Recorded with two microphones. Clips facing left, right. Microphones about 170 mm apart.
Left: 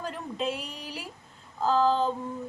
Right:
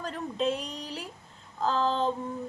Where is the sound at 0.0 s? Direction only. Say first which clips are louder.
Right 2 dB; 5° left (ahead or behind).